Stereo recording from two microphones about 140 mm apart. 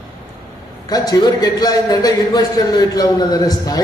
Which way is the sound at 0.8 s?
25° left (ahead or behind).